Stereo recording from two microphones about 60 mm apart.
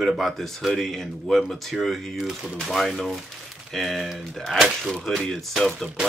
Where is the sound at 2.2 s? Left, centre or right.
Centre.